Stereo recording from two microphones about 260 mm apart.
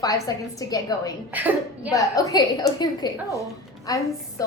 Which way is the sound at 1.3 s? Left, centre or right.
Centre.